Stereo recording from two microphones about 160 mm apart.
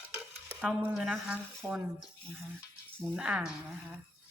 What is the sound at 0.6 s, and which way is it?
Speech, 10° right (ahead or behind).